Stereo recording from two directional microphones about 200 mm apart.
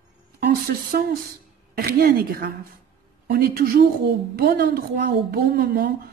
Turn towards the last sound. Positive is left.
turn(degrees=-45)  # may be behind; listen again after turning